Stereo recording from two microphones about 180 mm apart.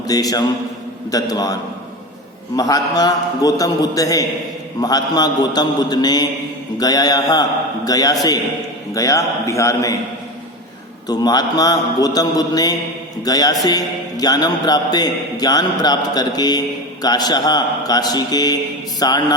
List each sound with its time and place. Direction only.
0.1 s a man's voice: 20° left (ahead or behind)
2.6 s a man's voice: 20° left (ahead or behind)
11.1 s a man's voice: 20° left (ahead or behind)